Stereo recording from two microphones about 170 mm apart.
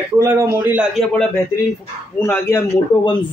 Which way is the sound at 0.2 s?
15° right (ahead or behind).